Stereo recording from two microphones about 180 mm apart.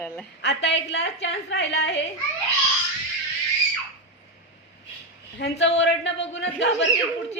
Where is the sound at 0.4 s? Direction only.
75° left (ahead or behind).